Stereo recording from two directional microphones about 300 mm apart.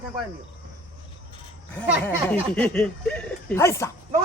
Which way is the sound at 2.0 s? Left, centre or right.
Centre.